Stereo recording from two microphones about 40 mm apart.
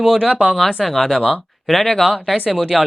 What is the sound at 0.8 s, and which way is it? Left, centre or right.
Speech, centre.